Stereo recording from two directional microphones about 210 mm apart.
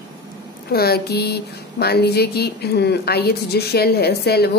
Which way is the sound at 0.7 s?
50° left (ahead or behind).